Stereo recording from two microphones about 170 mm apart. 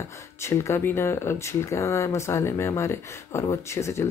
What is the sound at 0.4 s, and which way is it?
Speech, 15° left (ahead or behind).